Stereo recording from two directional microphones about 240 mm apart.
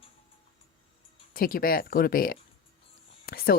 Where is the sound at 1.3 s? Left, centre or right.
Left.